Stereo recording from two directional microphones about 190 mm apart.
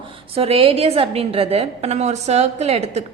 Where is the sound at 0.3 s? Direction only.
30° right (ahead or behind).